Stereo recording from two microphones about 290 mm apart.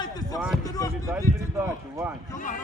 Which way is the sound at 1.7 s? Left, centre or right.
Centre.